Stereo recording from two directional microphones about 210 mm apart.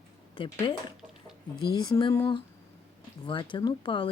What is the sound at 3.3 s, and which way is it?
Speech, 25° left (ahead or behind).